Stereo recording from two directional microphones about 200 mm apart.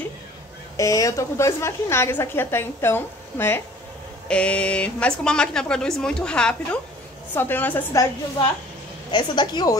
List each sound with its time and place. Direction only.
0.7 s a woman's voice: 15° left (ahead or behind)
9.1 s a woman's voice: 20° left (ahead or behind)